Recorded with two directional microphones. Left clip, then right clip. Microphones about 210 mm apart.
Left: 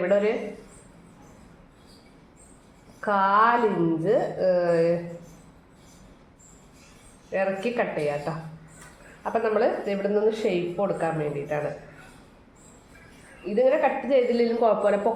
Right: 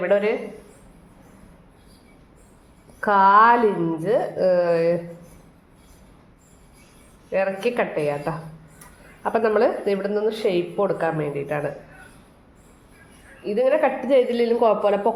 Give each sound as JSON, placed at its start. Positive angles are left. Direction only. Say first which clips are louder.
{"t": 0.0, "sound": "a woman's voice", "louder": "right 2 dB", "side_deg": -50}
{"t": 3.0, "sound": "a woman's voice", "louder": "right 6 dB", "side_deg": -50}
{"t": 7.3, "sound": "a woman's voice", "louder": "right 4 dB", "side_deg": -50}
{"t": 13.6, "sound": "a woman's voice", "louder": "right 2 dB", "side_deg": -50}